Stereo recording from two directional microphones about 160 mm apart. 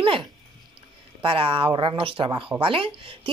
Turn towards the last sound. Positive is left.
turn(degrees=-35)  # may be behind; listen again after turning